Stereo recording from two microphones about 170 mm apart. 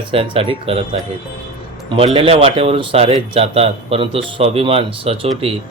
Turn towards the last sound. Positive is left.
turn(degrees=-35)  # may be behind; listen again after turning